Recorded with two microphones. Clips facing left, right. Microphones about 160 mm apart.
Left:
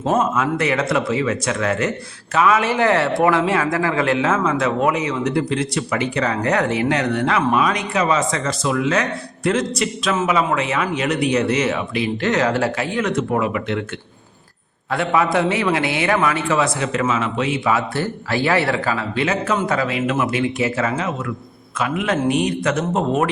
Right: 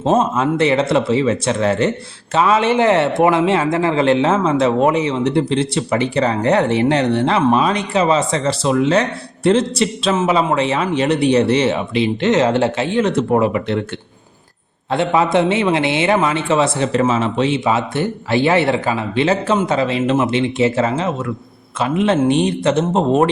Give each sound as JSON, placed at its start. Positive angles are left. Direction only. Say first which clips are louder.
{"t": 0.0, "sound": "speech", "louder": "right 3 dB", "side_deg": -25}
{"t": 14.8, "sound": "speech", "louder": "right 3 dB", "side_deg": -25}